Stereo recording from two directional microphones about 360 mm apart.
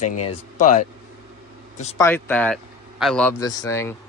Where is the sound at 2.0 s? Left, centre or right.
Centre.